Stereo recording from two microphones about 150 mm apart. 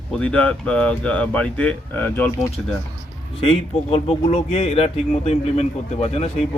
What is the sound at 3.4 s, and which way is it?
Speech, 40° left (ahead or behind).